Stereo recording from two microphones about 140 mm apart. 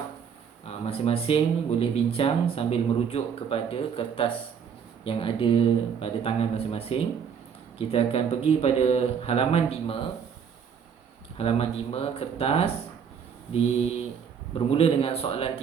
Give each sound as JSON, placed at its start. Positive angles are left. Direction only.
{"t": 0.6, "sound": "speech", "side_deg": 45}
{"t": 11.3, "sound": "speech", "side_deg": 45}